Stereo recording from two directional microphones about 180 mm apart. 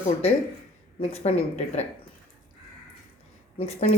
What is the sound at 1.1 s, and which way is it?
Speech, 35° left (ahead or behind).